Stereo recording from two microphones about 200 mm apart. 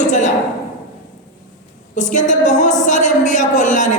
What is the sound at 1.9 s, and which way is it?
A woman's voice, 40° left (ahead or behind).